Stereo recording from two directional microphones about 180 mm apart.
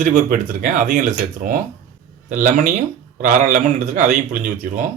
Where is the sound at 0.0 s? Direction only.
45° right (ahead or behind).